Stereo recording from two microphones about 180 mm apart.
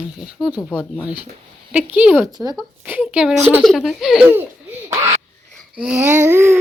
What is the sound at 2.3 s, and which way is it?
Speech, 20° right (ahead or behind).